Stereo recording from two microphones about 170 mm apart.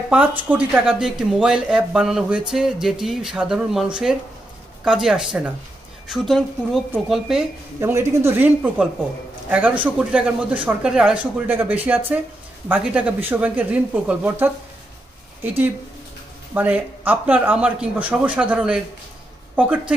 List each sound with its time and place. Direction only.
0.1 s speech: 10° right (ahead or behind)
7.8 s a woman's voice: 15° right (ahead or behind)